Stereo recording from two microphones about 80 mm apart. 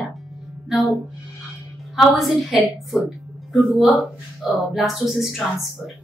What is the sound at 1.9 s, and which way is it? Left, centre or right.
Speech, centre.